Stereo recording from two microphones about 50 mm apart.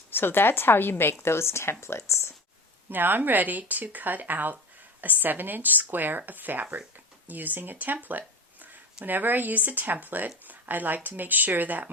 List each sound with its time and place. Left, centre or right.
0.1 s a woman's voice: left
1.2 s speech: left
2.9 s speech: right
9.0 s speech: right